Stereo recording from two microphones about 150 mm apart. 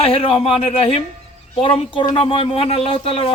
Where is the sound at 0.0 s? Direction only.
40° left (ahead or behind).